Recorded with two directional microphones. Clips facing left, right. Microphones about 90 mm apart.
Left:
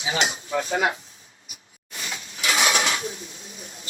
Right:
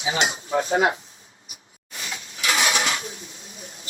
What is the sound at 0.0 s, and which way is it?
Speech, 35° right (ahead or behind).